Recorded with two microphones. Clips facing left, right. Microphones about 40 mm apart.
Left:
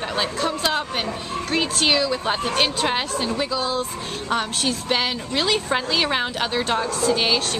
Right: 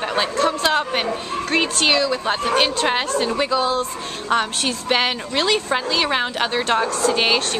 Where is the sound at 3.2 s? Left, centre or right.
Centre.